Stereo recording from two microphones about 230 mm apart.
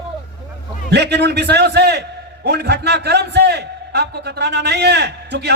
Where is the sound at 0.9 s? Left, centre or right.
Right.